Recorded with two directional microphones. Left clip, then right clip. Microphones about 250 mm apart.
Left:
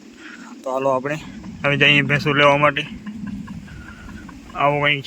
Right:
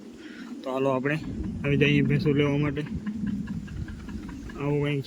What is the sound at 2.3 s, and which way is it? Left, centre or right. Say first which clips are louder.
Speech: left 15 dB; left.